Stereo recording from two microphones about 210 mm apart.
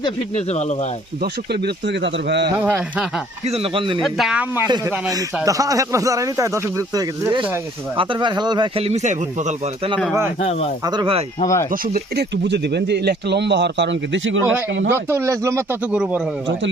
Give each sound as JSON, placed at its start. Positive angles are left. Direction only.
{"t": 0.0, "sound": "speech", "side_deg": 30}
{"t": 1.2, "sound": "speech", "side_deg": -50}
{"t": 2.6, "sound": "speech", "side_deg": -10}
{"t": 3.4, "sound": "speech", "side_deg": -30}
{"t": 4.0, "sound": "speech", "side_deg": 0}
{"t": 4.6, "sound": "speech", "side_deg": -15}
{"t": 7.9, "sound": "speech", "side_deg": -25}
{"t": 10.4, "sound": "speech", "side_deg": 30}
{"t": 10.8, "sound": "speech", "side_deg": -20}
{"t": 11.7, "sound": "speech", "side_deg": -45}
{"t": 14.8, "sound": "speech", "side_deg": -10}